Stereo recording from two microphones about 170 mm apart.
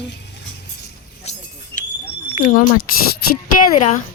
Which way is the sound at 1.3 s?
40° left (ahead or behind).